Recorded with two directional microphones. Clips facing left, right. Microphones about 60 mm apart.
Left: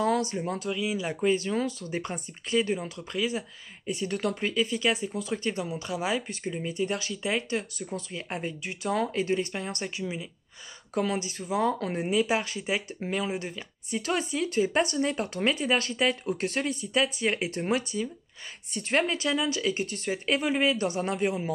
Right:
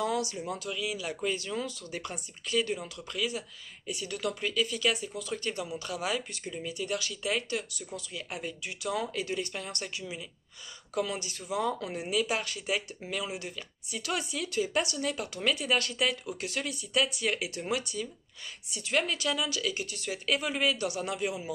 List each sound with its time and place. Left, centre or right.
0.0 s speech: left
0.7 s speech: left
12.1 s speech: left
16.3 s speech: left
19.0 s speech: left